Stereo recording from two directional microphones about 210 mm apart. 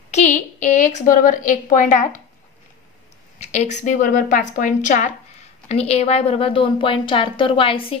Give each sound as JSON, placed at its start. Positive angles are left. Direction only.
{"t": 0.1, "sound": "a woman's voice", "side_deg": 35}
{"t": 3.3, "sound": "a woman's voice", "side_deg": 35}